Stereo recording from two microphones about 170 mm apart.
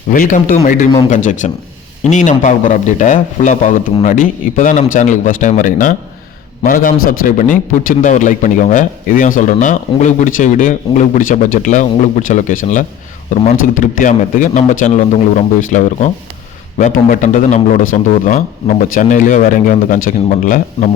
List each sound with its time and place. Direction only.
0.1 s speech: 55° left (ahead or behind)